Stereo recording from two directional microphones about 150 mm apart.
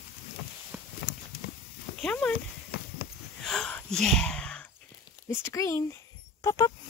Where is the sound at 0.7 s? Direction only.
15° right (ahead or behind).